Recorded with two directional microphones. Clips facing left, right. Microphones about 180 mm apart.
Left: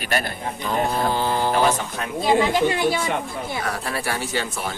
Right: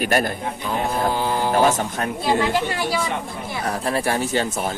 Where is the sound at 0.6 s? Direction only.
10° right (ahead or behind).